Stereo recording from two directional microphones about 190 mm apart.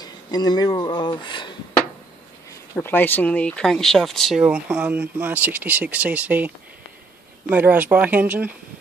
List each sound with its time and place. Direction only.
0.0 s speech: 20° left (ahead or behind)
2.7 s speech: 10° left (ahead or behind); by 8.5 s 10° right (ahead or behind)